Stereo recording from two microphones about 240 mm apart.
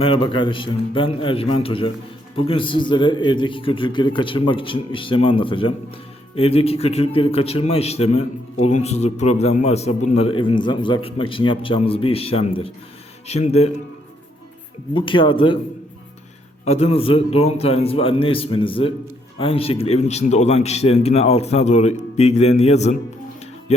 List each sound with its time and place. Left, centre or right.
0.0 s a man's voice: left
14.9 s a man's voice: left
16.6 s a man's voice: left